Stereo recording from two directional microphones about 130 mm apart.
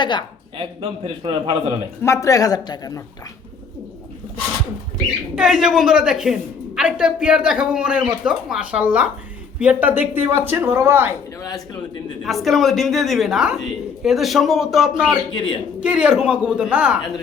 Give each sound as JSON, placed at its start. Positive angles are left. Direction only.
{"t": 0.0, "sound": "speech", "side_deg": 35}
{"t": 0.5, "sound": "a man's voice", "side_deg": -45}
{"t": 2.0, "sound": "speech", "side_deg": 25}
{"t": 5.3, "sound": "a woman's voice", "side_deg": -5}
{"t": 11.3, "sound": "speech", "side_deg": 25}
{"t": 12.2, "sound": "a woman's voice", "side_deg": 0}
{"t": 15.3, "sound": "speech", "side_deg": 40}
{"t": 15.8, "sound": "speech", "side_deg": -10}